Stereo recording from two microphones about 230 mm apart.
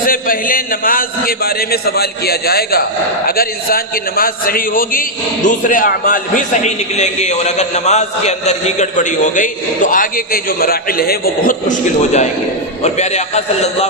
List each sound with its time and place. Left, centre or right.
0.0 s a man's voice: left